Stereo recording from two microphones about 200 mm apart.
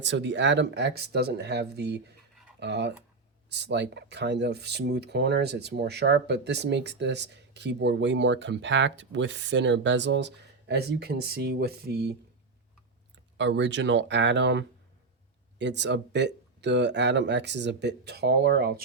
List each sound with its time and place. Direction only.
0.0 s speech: 60° right (ahead or behind)
13.3 s speech: 60° right (ahead or behind)